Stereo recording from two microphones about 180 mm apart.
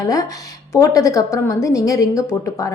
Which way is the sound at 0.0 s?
20° left (ahead or behind).